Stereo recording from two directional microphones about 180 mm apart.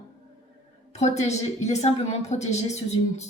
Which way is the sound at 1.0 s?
40° left (ahead or behind).